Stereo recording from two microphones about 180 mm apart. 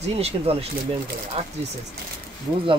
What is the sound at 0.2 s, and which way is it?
Speech, 35° right (ahead or behind).